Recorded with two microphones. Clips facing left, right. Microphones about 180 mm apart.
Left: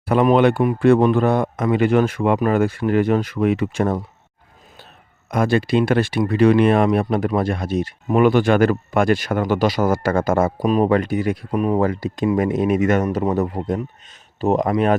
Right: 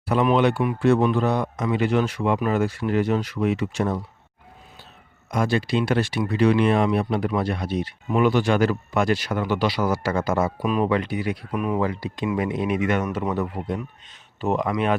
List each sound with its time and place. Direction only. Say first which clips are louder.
0.1 s speech: left 5 dB; 55° left (ahead or behind)
5.3 s speech: left 5 dB; 55° left (ahead or behind)